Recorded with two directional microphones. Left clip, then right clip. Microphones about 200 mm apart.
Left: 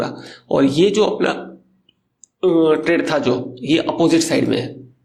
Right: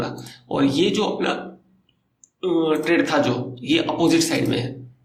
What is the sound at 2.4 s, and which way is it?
Speech, 45° left (ahead or behind).